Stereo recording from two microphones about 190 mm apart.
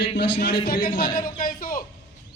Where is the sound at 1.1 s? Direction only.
50° left (ahead or behind).